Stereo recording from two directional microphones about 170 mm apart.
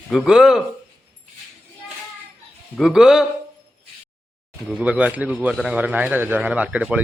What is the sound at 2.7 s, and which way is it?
Speech, centre (ahead or behind).